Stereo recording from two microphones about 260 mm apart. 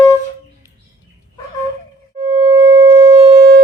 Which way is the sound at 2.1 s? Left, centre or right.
Centre.